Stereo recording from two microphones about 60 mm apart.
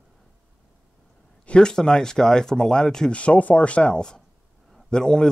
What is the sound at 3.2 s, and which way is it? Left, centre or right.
Speech, left.